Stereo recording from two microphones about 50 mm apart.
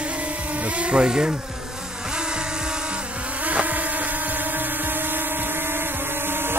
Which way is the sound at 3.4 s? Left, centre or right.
Right.